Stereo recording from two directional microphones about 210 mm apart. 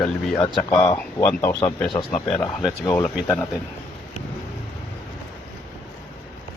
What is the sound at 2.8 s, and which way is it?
Speech, 10° left (ahead or behind).